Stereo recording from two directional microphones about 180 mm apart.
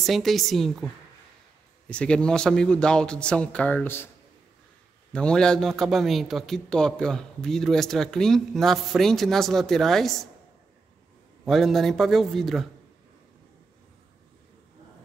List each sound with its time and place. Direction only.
0.0 s a man's voice: centre (ahead or behind)
5.1 s a man's voice: 5° left (ahead or behind)
11.4 s a man's voice: centre (ahead or behind)